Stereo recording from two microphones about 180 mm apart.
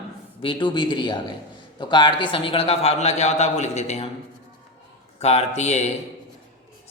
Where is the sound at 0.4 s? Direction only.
25° left (ahead or behind).